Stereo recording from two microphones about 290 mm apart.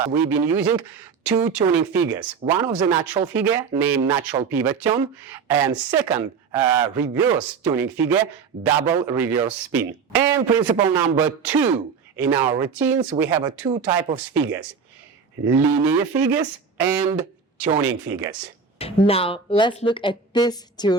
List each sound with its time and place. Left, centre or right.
0.1 s speech: centre
15.4 s speech: centre
18.8 s speech: centre